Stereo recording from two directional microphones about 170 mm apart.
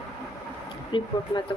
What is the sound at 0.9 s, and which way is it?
Speech, 30° left (ahead or behind).